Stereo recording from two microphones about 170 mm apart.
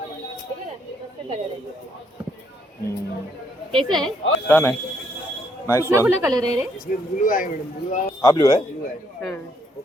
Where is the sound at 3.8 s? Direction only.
Centre (ahead or behind).